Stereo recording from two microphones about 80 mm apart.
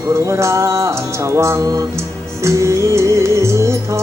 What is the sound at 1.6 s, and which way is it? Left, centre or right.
Music, right.